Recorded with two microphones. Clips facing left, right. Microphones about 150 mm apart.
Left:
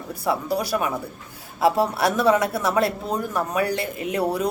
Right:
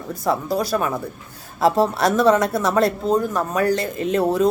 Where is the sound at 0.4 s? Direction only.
45° right (ahead or behind).